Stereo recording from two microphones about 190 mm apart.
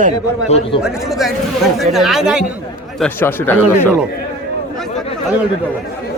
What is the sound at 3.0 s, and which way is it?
Speech, 10° left (ahead or behind).